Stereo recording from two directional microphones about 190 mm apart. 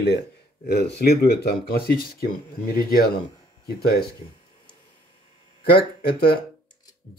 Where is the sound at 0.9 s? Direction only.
55° left (ahead or behind).